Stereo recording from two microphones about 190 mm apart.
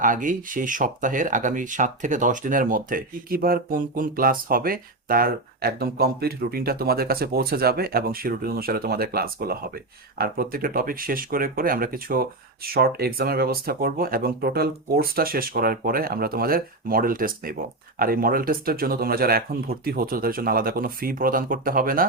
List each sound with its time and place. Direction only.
0.0 s speech: 45° right (ahead or behind)